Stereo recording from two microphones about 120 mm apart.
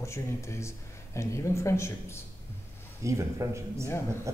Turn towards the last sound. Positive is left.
turn(degrees=-25)  # may be behind; listen again after turning